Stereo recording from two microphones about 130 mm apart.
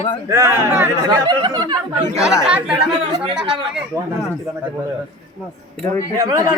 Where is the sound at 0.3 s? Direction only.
25° right (ahead or behind).